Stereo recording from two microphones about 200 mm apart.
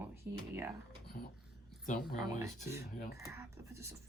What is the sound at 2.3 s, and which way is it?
Speech, 15° right (ahead or behind).